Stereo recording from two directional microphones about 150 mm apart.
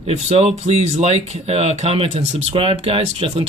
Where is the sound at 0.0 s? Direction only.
40° right (ahead or behind).